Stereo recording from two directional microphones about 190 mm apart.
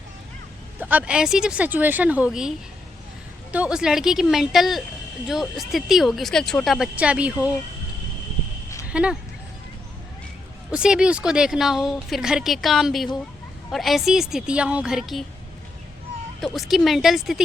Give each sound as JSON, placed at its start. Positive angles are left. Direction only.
{"t": 0.8, "sound": "speech", "side_deg": -10}
{"t": 3.5, "sound": "a woman's voice", "side_deg": -5}
{"t": 8.9, "sound": "speech", "side_deg": -5}
{"t": 10.7, "sound": "a woman's voice", "side_deg": -5}
{"t": 16.4, "sound": "a woman's voice", "side_deg": 0}